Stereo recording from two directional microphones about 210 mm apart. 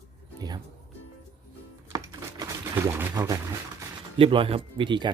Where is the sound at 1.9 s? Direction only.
15° right (ahead or behind).